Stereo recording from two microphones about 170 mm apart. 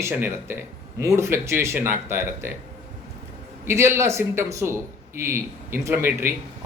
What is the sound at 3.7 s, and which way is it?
A man's voice, 15° right (ahead or behind).